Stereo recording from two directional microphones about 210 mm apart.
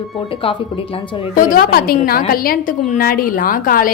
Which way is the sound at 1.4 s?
45° left (ahead or behind).